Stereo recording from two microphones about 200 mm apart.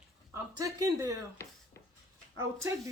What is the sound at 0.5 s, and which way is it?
Speech, 15° right (ahead or behind).